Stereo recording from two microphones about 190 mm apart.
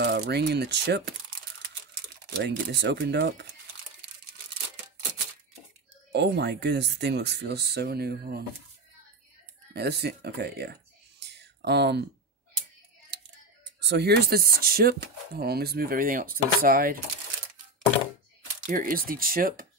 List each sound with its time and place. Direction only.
0.0 s speech: 60° right (ahead or behind)
2.3 s speech: 65° right (ahead or behind)
6.1 s speech: 60° right (ahead or behind)
9.8 s speech: 60° right (ahead or behind)
13.7 s speech: 60° right (ahead or behind)
18.7 s speech: 45° right (ahead or behind)